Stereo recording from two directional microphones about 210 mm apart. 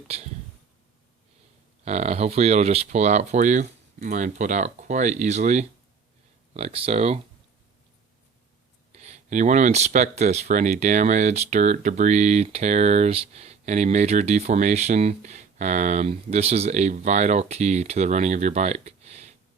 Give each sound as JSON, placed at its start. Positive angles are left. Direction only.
{"t": 0.1, "sound": "speech", "side_deg": -30}
{"t": 1.8, "sound": "speech", "side_deg": -30}
{"t": 8.9, "sound": "speech", "side_deg": -30}